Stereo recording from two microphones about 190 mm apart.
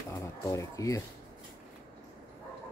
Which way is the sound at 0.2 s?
15° left (ahead or behind).